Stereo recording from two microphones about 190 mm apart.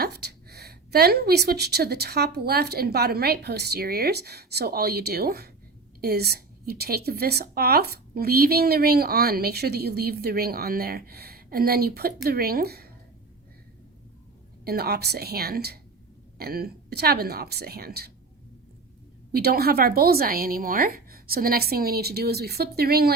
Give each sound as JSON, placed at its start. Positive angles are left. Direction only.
{"t": 0.0, "sound": "a woman's voice", "side_deg": -60}
{"t": 14.6, "sound": "a woman's voice", "side_deg": -55}
{"t": 19.3, "sound": "a woman's voice", "side_deg": -55}